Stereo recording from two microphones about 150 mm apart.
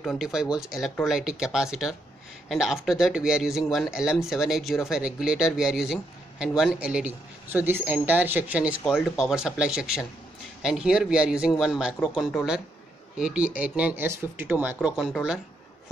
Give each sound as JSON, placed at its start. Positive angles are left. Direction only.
{"t": 0.0, "sound": "speech", "side_deg": 0}